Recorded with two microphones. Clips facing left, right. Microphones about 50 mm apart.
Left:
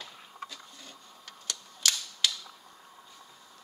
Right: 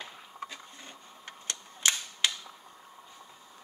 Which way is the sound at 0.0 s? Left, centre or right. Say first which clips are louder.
Right 2 dB; right.